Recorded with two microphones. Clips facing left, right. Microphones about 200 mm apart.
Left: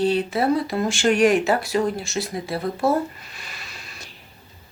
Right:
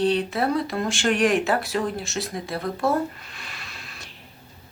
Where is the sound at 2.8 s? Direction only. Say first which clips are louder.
Left 2 dB; centre (ahead or behind).